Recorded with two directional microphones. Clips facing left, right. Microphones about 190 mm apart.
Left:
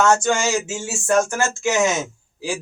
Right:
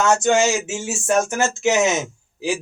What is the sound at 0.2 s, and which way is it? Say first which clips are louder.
Speech: right 3 dB; 20° right (ahead or behind).